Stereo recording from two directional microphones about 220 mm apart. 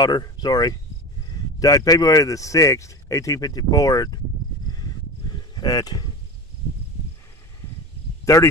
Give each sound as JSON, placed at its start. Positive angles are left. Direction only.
{"t": 0.0, "sound": "speech", "side_deg": 20}
{"t": 5.6, "sound": "speech", "side_deg": 15}